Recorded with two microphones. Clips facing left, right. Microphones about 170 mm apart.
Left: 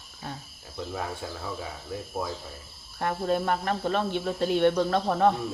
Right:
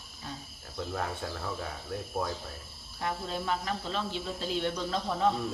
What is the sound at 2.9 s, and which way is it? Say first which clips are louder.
Speech: left 8 dB; 55° left (ahead or behind).